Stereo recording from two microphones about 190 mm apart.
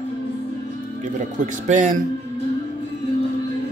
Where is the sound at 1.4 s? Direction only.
40° right (ahead or behind).